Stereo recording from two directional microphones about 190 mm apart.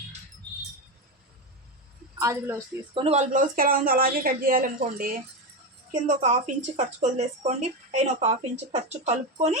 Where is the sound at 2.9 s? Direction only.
35° right (ahead or behind).